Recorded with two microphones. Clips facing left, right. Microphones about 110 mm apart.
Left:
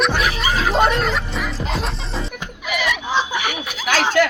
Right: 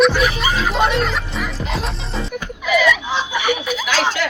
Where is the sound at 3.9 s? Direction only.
50° left (ahead or behind).